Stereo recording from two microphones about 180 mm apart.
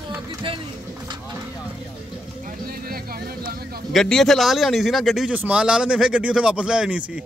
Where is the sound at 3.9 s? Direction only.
Centre (ahead or behind).